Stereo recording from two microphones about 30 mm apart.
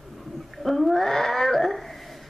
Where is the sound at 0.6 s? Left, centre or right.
Centre.